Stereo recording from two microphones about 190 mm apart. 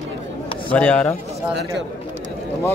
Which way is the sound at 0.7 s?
5° left (ahead or behind).